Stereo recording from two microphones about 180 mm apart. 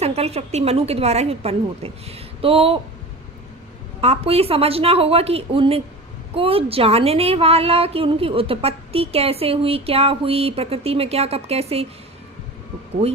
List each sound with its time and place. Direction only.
0.0 s a woman's voice: 35° right (ahead or behind)
4.0 s a woman's voice: 35° right (ahead or behind)